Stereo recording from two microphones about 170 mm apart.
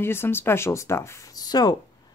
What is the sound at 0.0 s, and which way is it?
Speech, 15° left (ahead or behind).